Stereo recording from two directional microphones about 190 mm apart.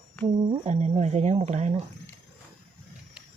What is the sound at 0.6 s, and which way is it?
Speech, 35° right (ahead or behind).